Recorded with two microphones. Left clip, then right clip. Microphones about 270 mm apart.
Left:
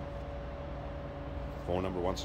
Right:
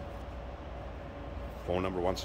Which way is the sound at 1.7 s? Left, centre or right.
Centre.